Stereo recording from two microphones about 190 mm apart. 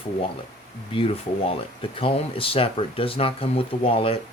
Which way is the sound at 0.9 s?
30° left (ahead or behind).